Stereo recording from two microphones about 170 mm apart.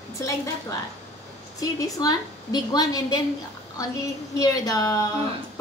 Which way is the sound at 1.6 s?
20° left (ahead or behind).